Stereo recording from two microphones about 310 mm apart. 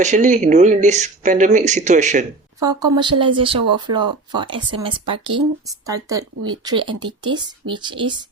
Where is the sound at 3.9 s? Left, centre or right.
Right.